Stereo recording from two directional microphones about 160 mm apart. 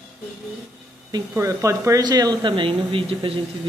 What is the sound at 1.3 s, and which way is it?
Speech, 20° right (ahead or behind).